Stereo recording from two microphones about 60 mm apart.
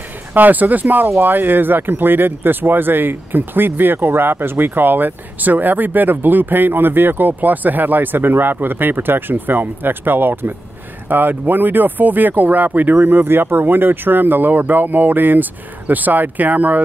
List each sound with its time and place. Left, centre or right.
0.3 s speech: right